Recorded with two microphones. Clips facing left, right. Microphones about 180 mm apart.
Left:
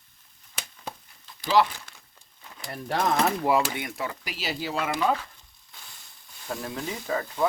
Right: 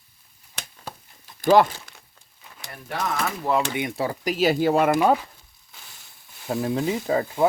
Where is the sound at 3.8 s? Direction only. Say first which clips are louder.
Right 7 dB; 25° right (ahead or behind); by 5.1 s 50° right (ahead or behind).